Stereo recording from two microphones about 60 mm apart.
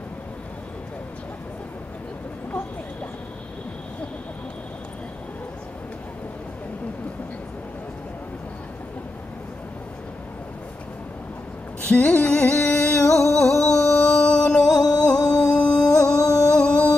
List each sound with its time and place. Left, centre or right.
11.8 s music: left
13.3 s a sound: centre
13.9 s music: centre